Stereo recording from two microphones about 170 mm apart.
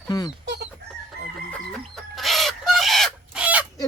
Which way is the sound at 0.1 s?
25° left (ahead or behind).